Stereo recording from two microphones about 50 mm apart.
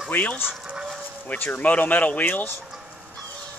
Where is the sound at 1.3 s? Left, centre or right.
Left.